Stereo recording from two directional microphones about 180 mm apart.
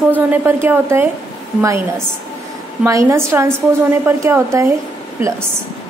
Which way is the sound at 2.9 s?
15° right (ahead or behind).